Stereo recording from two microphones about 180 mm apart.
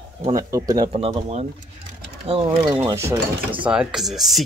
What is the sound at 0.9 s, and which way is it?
Speech, 30° right (ahead or behind).